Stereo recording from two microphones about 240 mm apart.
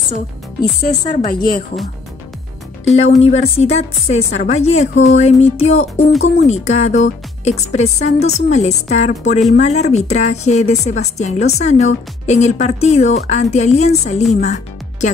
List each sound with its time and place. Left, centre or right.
0.8 s speech: left
2.9 s speech: left
14.3 s music: left